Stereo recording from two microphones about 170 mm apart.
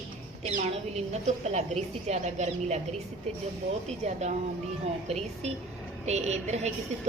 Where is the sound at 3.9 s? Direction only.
40° right (ahead or behind).